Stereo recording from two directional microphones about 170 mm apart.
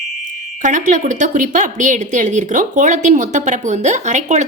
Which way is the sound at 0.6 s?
50° right (ahead or behind).